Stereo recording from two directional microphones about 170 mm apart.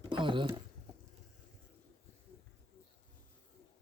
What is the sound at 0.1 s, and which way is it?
Speech, 30° right (ahead or behind).